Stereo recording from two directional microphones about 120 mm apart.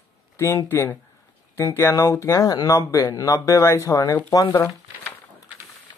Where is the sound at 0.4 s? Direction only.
20° left (ahead or behind).